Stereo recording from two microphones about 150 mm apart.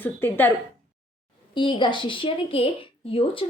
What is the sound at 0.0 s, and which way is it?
Speech, 15° left (ahead or behind).